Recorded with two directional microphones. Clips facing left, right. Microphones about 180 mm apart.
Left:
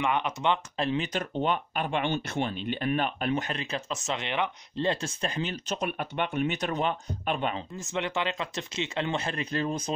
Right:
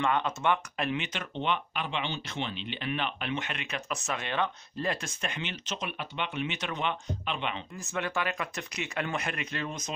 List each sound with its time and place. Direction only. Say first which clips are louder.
0.0 s speech: left 1 dB; 15° left (ahead or behind)
0.7 s speech: left 4 dB; 30° left (ahead or behind)
7.7 s speech: left 2 dB; 20° left (ahead or behind)